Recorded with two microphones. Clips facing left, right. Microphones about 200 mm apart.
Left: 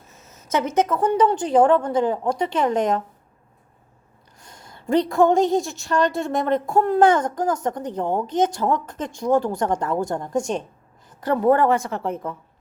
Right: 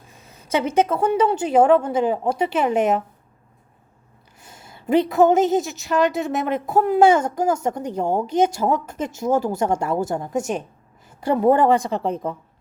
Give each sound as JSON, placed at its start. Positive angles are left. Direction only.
{"t": 0.2, "sound": "a sound", "side_deg": -10}
{"t": 1.0, "sound": "a woman's voice", "side_deg": -10}
{"t": 4.4, "sound": "a woman's voice", "side_deg": -5}